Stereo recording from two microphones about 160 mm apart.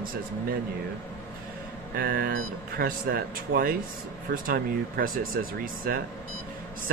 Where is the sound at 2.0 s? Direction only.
65° right (ahead or behind).